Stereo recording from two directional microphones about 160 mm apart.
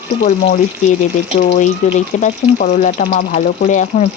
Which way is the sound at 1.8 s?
50° left (ahead or behind).